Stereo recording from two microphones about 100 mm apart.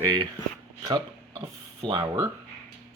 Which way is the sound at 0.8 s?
50° right (ahead or behind).